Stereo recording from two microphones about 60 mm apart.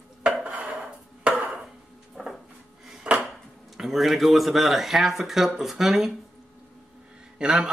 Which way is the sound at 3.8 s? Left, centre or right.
Centre.